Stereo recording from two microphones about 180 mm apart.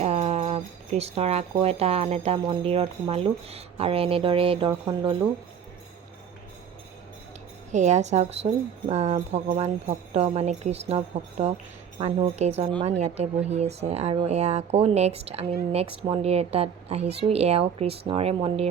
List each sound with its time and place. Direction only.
0.0 s speech: 35° right (ahead or behind)
7.7 s speech: 40° right (ahead or behind)